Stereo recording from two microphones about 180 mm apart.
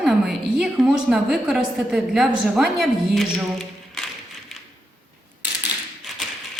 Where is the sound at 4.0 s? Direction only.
5° left (ahead or behind).